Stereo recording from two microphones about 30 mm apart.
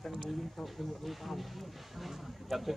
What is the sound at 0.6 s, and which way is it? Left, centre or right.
Speech, centre.